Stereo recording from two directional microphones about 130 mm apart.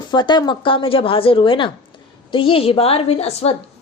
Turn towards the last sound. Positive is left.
turn(degrees=55)  # may be behind; listen again after turning